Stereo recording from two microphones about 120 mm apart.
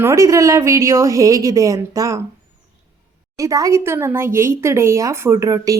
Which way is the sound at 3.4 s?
30° right (ahead or behind).